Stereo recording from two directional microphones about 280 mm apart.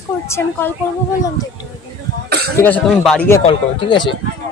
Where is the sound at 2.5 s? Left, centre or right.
Centre.